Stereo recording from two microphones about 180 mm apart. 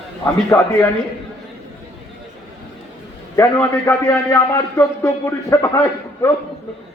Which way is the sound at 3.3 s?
15° left (ahead or behind).